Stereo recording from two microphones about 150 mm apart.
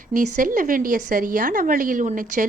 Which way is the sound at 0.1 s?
60° right (ahead or behind).